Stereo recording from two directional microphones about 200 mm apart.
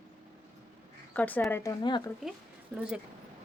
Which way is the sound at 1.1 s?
10° left (ahead or behind).